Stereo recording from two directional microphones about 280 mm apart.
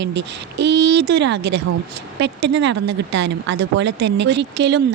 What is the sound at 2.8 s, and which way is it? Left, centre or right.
Speech, right.